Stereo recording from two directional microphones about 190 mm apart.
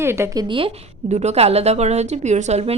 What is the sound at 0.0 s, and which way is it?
Speech, 15° right (ahead or behind).